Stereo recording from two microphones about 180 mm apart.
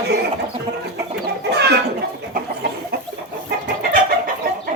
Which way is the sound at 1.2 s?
65° right (ahead or behind).